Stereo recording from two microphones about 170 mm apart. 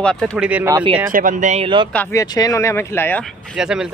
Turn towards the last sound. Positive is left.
turn(degrees=-5)  # may be behind; listen again after turning